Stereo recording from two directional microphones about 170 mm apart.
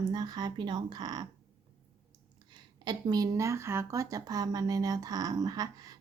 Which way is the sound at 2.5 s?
25° right (ahead or behind).